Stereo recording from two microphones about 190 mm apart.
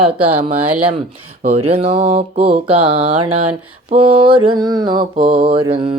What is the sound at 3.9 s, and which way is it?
Mantra, 30° right (ahead or behind).